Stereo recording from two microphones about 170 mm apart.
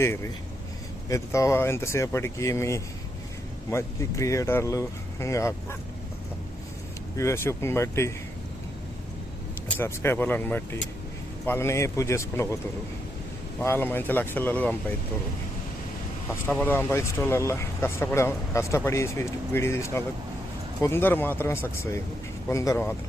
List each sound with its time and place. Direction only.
0.0 s speech: 15° left (ahead or behind)
7.2 s speech: 15° left (ahead or behind)
9.6 s speech: 10° left (ahead or behind)
13.6 s speech: 15° left (ahead or behind)
16.3 s speech: 10° left (ahead or behind)